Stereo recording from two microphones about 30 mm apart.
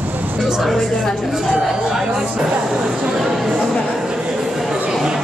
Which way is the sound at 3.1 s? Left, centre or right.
Centre.